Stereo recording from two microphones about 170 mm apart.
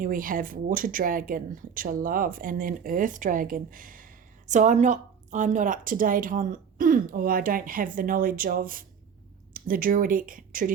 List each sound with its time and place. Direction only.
0.0 s speech: 55° right (ahead or behind)